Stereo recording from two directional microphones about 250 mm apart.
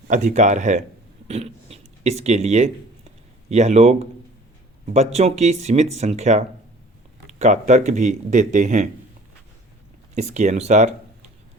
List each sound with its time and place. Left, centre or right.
0.1 s speech: right
4.9 s speech: right
10.2 s speech: right